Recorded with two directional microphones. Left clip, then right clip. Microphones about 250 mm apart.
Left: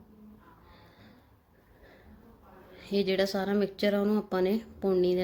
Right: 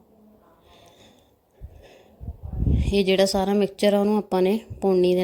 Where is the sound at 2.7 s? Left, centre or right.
Right.